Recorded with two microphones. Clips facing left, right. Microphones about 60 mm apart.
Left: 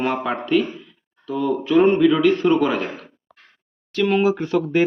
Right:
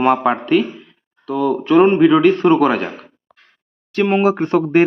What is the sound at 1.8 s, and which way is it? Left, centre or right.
Speech, right.